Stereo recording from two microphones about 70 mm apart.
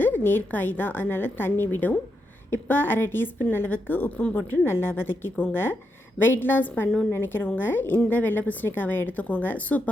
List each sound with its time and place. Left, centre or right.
0.0 s a woman's voice: left